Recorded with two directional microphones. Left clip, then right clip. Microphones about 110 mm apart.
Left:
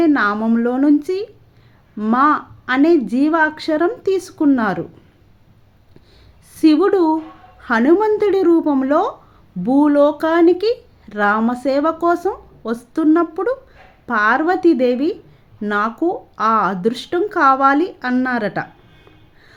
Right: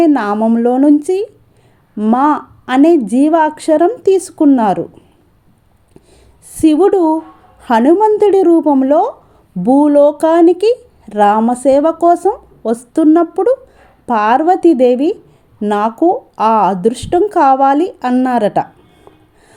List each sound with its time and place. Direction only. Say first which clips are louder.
0.0 s speech: right 4 dB; 40° right (ahead or behind)
6.5 s speech: right 4 dB; 40° right (ahead or behind)